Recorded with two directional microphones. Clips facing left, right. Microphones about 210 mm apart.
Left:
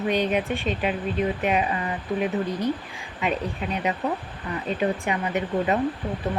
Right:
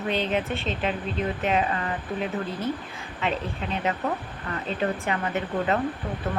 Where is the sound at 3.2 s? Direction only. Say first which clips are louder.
Left 2 dB; 15° left (ahead or behind).